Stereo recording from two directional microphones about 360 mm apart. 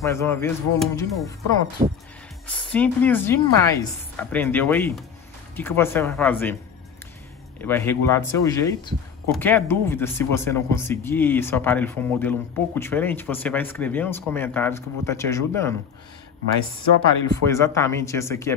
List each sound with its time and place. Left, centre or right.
0.0 s speech: centre
1.8 s speech: right
2.4 s speech: centre
7.6 s speech: centre
17.3 s speech: centre